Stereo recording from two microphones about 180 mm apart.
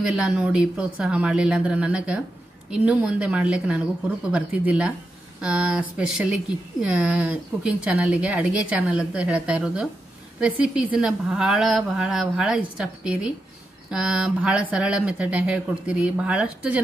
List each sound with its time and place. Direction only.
0.0 s speech: 5° right (ahead or behind)